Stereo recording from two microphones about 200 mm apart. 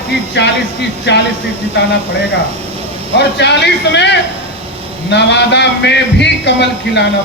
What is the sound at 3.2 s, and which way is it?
A man's voice, 60° left (ahead or behind).